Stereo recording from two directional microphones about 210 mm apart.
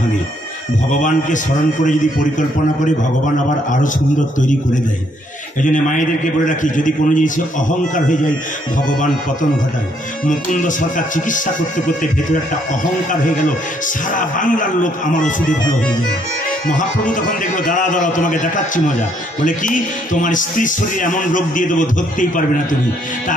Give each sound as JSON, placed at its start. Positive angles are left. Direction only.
{"t": 1.0, "sound": "a man's voice", "side_deg": 35}
{"t": 5.6, "sound": "a man's voice", "side_deg": 40}
{"t": 10.2, "sound": "a man's voice", "side_deg": 40}
{"t": 14.1, "sound": "a man's voice", "side_deg": 40}
{"t": 16.6, "sound": "a man's voice", "side_deg": 40}